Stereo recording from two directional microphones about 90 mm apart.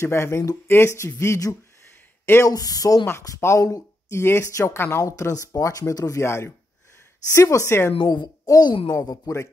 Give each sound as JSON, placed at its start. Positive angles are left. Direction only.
{"t": 0.0, "sound": "speech", "side_deg": 30}
{"t": 3.1, "sound": "speech", "side_deg": 30}
{"t": 4.2, "sound": "speech", "side_deg": 30}
{"t": 8.1, "sound": "speech", "side_deg": 45}